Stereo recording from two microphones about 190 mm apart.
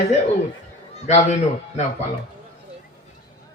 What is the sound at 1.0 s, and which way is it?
Speech, 35° left (ahead or behind).